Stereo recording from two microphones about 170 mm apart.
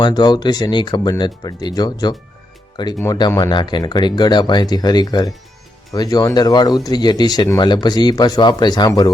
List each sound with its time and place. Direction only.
0.0 s speech: 25° left (ahead or behind)